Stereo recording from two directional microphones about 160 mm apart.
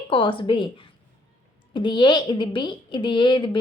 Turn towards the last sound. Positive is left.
turn(degrees=30)  # may be behind; listen again after turning